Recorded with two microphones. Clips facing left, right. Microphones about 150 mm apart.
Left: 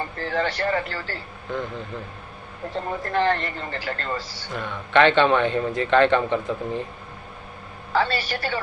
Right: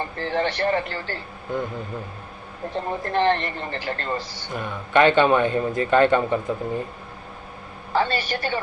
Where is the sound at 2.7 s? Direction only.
20° right (ahead or behind).